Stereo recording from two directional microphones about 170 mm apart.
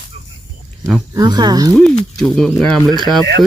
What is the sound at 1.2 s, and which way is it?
Speech, 25° right (ahead or behind).